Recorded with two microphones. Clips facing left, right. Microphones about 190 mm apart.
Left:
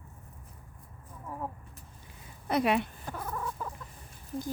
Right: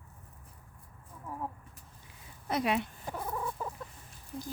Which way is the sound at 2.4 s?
60° left (ahead or behind).